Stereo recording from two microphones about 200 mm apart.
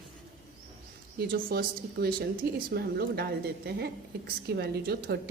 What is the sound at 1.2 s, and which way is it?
A woman's voice, 50° right (ahead or behind).